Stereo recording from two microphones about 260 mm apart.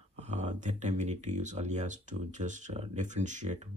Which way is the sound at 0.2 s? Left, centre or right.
Right.